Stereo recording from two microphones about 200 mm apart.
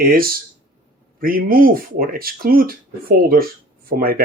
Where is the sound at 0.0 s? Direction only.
45° right (ahead or behind).